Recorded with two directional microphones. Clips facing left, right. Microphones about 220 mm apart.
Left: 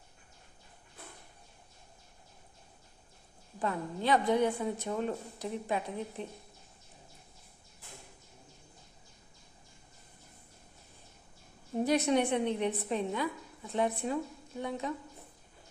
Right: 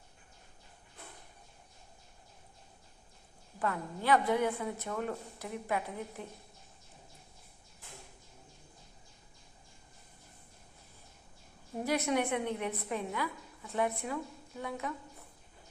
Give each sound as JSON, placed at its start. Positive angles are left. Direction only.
{"t": 3.6, "sound": "a woman's voice", "side_deg": 20}
{"t": 11.9, "sound": "a woman's voice", "side_deg": 20}